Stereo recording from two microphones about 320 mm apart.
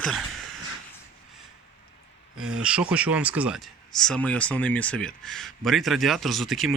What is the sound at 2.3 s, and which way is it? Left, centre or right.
Speech, right.